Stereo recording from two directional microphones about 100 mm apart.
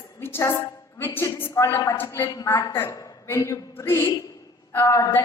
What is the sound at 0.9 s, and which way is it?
Mantra, 25° left (ahead or behind).